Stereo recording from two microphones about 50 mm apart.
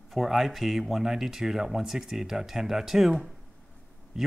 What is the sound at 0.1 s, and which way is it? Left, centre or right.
Speech, centre.